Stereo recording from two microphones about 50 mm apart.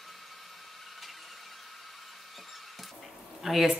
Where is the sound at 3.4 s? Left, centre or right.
Centre.